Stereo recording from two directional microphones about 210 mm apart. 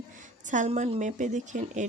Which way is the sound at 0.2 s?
35° right (ahead or behind).